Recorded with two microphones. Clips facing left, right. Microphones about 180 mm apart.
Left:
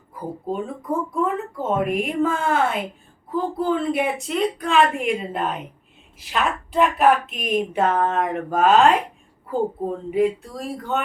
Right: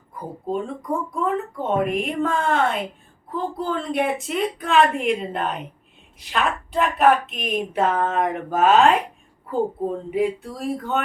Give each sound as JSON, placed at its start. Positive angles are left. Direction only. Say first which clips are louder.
{"t": 0.1, "sound": "a woman's voice", "louder": "right 1 dB", "side_deg": 5}